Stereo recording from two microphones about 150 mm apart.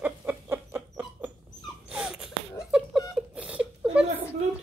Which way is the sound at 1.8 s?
5° right (ahead or behind).